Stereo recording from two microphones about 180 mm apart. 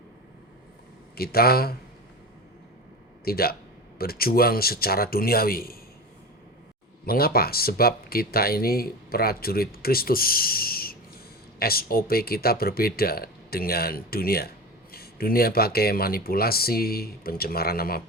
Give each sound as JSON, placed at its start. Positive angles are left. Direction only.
{"t": 1.1, "sound": "speech", "side_deg": 60}
{"t": 3.2, "sound": "speech", "side_deg": 55}
{"t": 7.0, "sound": "speech", "side_deg": 55}